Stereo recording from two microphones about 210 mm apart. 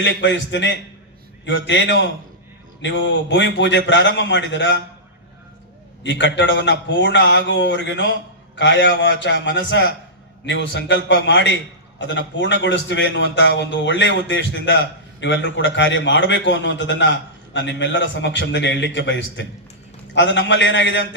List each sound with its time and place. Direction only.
0.0 s a man's voice: 60° left (ahead or behind)
6.0 s a man's voice: 60° left (ahead or behind)